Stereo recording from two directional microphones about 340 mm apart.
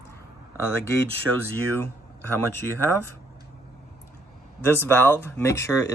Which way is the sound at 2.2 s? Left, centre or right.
Right.